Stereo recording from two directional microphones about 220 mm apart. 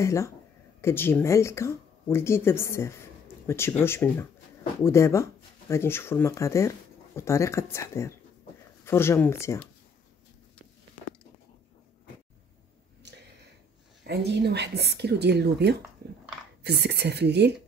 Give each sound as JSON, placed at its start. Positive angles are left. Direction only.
{"t": 0.0, "sound": "speech", "side_deg": 15}
{"t": 14.0, "sound": "speech", "side_deg": -50}